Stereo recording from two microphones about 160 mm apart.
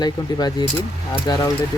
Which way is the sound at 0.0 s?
25° left (ahead or behind).